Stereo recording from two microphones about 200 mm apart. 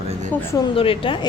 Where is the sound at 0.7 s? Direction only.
25° left (ahead or behind).